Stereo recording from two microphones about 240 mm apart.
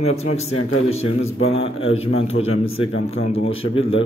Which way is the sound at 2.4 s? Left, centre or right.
Left.